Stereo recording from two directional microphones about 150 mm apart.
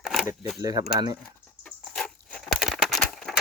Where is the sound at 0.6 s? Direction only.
25° right (ahead or behind).